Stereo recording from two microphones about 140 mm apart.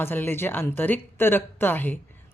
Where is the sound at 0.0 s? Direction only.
15° left (ahead or behind).